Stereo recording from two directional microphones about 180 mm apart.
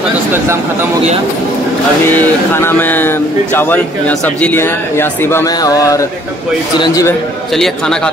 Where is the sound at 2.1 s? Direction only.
10° left (ahead or behind).